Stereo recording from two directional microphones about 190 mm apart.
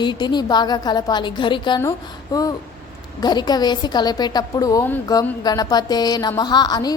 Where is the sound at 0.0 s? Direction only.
25° left (ahead or behind).